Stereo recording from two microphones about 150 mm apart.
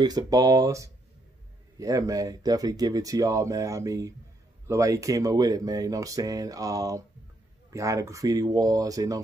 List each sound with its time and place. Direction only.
0.0 s speech: 25° right (ahead or behind)